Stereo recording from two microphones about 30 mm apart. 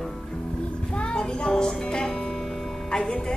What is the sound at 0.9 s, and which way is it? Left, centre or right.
Music, left.